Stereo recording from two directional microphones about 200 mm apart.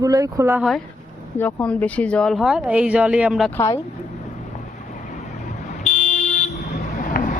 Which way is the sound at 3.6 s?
15° left (ahead or behind).